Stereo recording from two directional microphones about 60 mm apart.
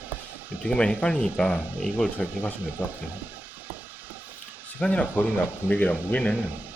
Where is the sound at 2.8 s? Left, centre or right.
Right.